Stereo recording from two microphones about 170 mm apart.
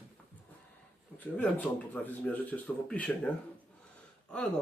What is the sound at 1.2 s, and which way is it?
Speech, 10° left (ahead or behind).